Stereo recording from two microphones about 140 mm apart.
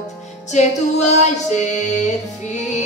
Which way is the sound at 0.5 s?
55° left (ahead or behind).